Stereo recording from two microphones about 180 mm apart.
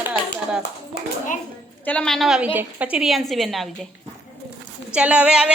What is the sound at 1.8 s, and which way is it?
A woman's voice, 5° left (ahead or behind).